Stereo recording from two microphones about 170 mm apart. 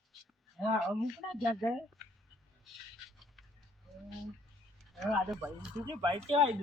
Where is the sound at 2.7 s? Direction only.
Centre (ahead or behind).